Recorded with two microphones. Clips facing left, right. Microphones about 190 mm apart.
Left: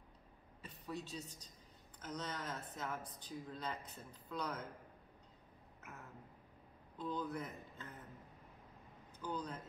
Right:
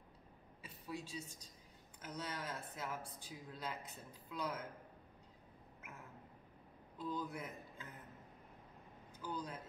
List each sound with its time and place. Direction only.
0.6 s a woman's voice: 10° right (ahead or behind)
7.0 s a man's voice: 10° right (ahead or behind)
9.2 s speech: 10° right (ahead or behind)